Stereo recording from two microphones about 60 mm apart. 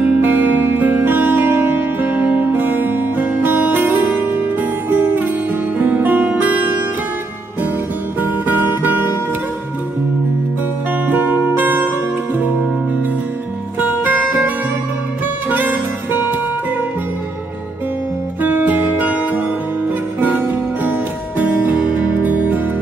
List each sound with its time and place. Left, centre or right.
0.0 s music: right
8.2 s music: right
11.1 s music: right
13.7 s music: right
15.5 s music: right
18.4 s music: right